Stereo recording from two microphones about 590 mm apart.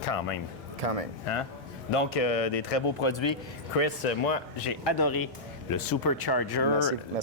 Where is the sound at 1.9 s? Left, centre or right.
Left.